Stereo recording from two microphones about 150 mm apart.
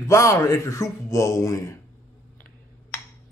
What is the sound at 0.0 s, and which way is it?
A man's voice, 20° left (ahead or behind).